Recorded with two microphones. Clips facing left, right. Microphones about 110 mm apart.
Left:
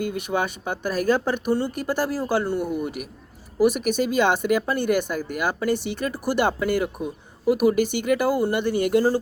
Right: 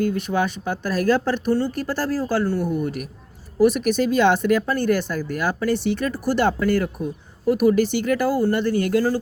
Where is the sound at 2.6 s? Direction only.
5° left (ahead or behind).